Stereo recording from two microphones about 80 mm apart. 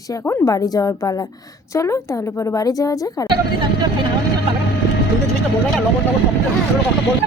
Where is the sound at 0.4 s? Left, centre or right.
Left.